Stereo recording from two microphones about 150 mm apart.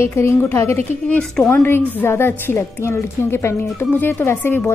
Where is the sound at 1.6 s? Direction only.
15° left (ahead or behind).